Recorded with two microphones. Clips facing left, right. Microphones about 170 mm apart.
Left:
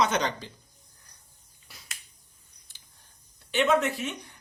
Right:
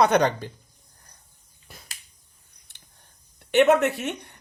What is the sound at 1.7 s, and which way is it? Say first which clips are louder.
Finger snapping: right 6 dB; 50° right (ahead or behind).